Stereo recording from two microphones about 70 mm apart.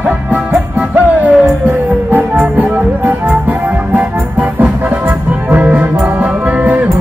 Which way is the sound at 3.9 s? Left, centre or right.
Right.